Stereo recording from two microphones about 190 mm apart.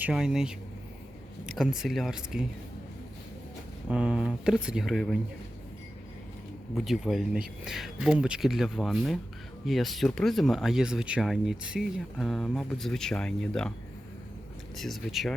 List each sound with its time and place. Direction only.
0.0 s speech: 5° right (ahead or behind)
1.5 s speech: 5° right (ahead or behind)
3.8 s speech: 5° right (ahead or behind)
6.7 s speech: centre (ahead or behind)
14.8 s speech: centre (ahead or behind)